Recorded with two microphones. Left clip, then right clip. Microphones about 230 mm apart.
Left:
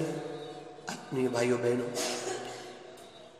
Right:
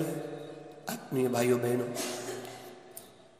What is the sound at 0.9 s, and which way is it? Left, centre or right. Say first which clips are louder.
Speech: right 1 dB; right.